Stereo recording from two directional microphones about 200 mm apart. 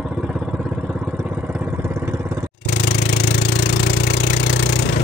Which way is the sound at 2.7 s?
45° left (ahead or behind).